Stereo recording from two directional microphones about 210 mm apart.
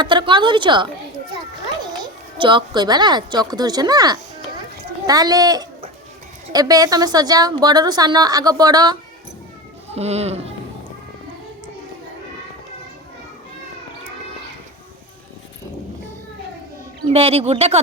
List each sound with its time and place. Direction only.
0.0 s a woman's voice: 20° right (ahead or behind)
9.9 s a woman's voice: 30° right (ahead or behind)
17.1 s a woman's voice: 30° right (ahead or behind)